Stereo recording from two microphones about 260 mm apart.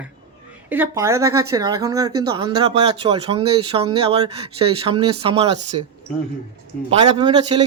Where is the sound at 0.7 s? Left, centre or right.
Centre.